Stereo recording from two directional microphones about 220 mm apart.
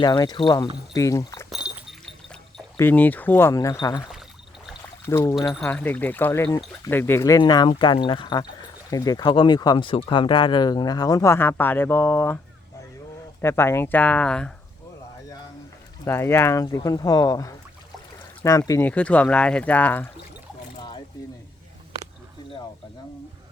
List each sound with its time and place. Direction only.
0.0 s speech: 20° left (ahead or behind)
1.5 s goat: 5° right (ahead or behind)
2.7 s speech: 10° left (ahead or behind)
5.0 s speech: 10° left (ahead or behind)
5.4 s speech: centre (ahead or behind)
13.4 s speech: 10° left (ahead or behind)
16.0 s speech: 10° left (ahead or behind)
20.7 s boat: 20° left (ahead or behind)